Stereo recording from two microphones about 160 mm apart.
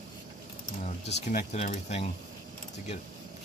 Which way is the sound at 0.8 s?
50° left (ahead or behind).